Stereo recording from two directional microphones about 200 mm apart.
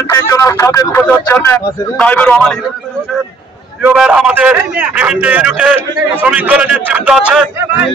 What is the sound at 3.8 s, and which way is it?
A man's voice, 5° right (ahead or behind).